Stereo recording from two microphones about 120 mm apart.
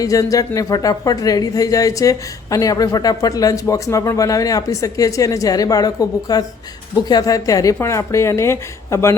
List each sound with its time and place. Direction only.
0.0 s speech: 30° left (ahead or behind)